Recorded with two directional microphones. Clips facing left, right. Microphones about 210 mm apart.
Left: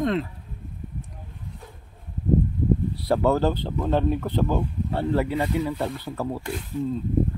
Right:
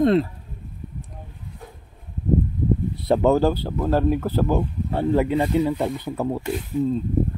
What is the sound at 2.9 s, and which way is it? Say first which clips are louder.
Speech: right 6 dB; 20° right (ahead or behind).